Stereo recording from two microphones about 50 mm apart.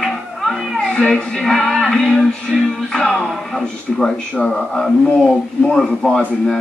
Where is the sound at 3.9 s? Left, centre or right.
Centre.